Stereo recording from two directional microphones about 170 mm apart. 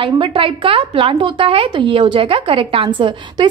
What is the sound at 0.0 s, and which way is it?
A woman's voice, 30° right (ahead or behind).